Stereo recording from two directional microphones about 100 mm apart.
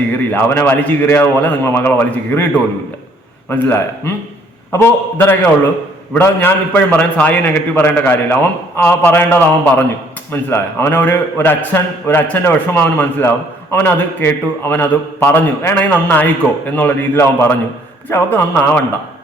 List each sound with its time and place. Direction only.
0.3 s a man's voice: 20° left (ahead or behind)
3.5 s a man's voice: 25° left (ahead or behind)